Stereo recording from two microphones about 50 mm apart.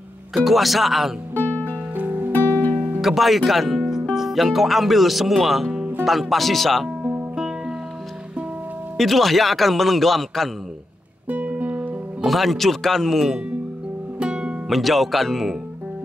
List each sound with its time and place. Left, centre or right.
0.3 s speech: centre
1.3 s music: left
2.0 s music: right
3.0 s speech: centre
7.0 s music: right
7.3 s music: centre
8.9 s speech: centre
11.2 s music: right
12.3 s speech: centre
14.2 s music: centre
14.7 s speech: centre